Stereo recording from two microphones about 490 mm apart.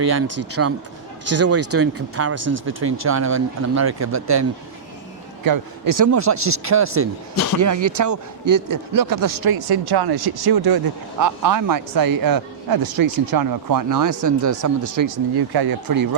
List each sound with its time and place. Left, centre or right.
0.1 s speech: right
5.5 s a man's voice: right